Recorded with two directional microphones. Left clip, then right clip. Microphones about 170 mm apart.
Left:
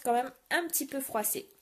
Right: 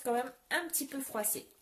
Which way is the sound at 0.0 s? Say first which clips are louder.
Left 4 dB; 40° left (ahead or behind).